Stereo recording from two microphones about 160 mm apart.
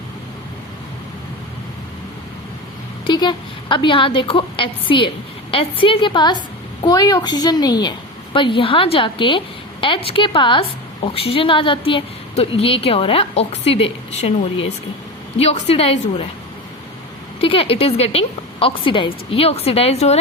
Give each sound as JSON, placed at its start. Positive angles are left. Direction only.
{"t": 3.1, "sound": "a woman's voice", "side_deg": 30}
{"t": 15.4, "sound": "a woman's voice", "side_deg": 40}
{"t": 17.4, "sound": "a woman's voice", "side_deg": 35}